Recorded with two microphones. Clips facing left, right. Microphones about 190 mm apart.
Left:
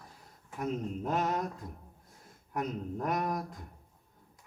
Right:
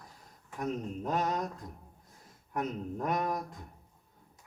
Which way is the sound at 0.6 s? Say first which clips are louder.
Left 1 dB; 5° left (ahead or behind).